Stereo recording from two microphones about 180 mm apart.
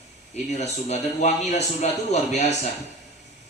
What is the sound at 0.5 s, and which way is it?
A man's voice, 40° left (ahead or behind).